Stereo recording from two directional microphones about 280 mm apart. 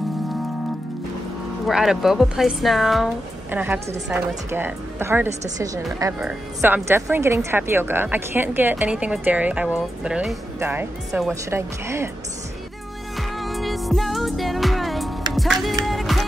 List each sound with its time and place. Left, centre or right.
1.7 s speech: centre
13.4 s music: centre